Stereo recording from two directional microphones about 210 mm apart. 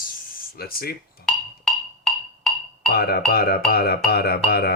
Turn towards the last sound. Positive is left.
turn(degrees=50)  # may be behind; listen again after turning